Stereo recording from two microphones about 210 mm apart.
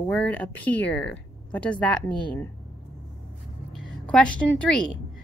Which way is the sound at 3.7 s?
Centre (ahead or behind).